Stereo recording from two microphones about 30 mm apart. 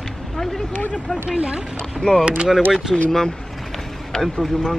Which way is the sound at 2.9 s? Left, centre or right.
Centre.